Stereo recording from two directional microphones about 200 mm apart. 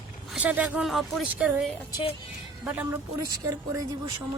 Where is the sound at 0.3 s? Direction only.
5° right (ahead or behind).